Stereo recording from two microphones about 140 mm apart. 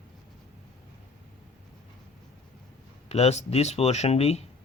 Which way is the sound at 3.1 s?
50° left (ahead or behind).